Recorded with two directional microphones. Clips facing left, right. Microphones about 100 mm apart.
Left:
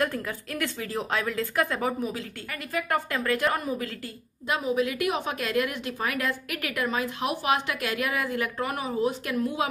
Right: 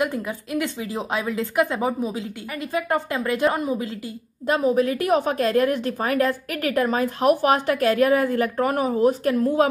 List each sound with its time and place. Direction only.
0.0 s a woman's voice: 15° right (ahead or behind)
4.5 s a woman's voice: 40° right (ahead or behind)